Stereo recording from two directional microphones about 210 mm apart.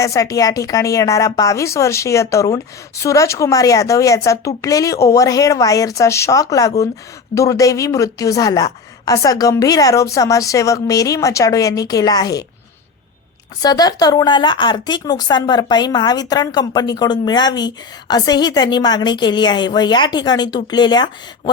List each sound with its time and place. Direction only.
0.0 s a woman's voice: 15° left (ahead or behind)
13.6 s a woman's voice: 20° left (ahead or behind)